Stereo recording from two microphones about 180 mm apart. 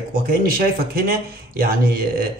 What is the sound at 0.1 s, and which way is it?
A man's voice, 55° right (ahead or behind).